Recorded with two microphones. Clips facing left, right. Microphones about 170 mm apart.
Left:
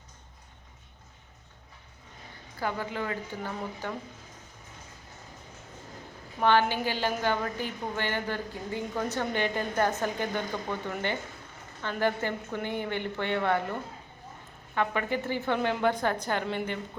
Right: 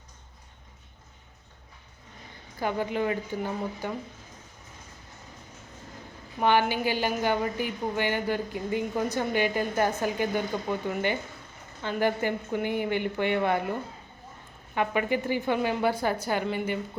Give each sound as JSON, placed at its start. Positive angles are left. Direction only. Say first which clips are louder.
{"t": 2.6, "sound": "a woman's voice", "louder": "right 4 dB", "side_deg": -20}
{"t": 6.4, "sound": "a woman's voice", "louder": "right 1 dB", "side_deg": -15}
{"t": 14.8, "sound": "a woman's voice", "louder": "right 2 dB", "side_deg": -15}